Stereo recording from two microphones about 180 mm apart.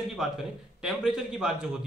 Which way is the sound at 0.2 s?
Centre (ahead or behind).